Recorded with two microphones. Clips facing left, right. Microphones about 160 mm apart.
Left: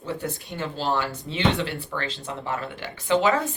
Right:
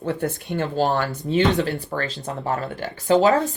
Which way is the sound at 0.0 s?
55° right (ahead or behind).